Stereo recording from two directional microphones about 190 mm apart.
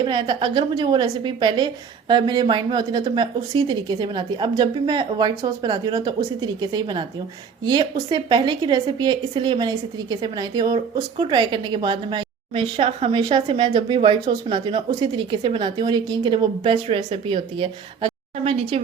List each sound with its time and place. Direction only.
0.0 s a woman's voice: 25° right (ahead or behind)